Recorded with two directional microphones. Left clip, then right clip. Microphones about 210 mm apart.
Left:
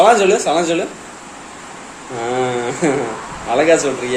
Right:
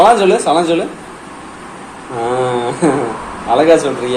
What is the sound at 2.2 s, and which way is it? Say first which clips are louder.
Speech: right 3 dB; 10° left (ahead or behind).